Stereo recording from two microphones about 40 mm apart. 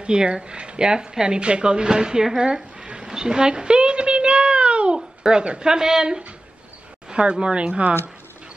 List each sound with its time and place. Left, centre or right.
0.0 s speech: right
2.4 s a sound: centre
7.2 s speech: right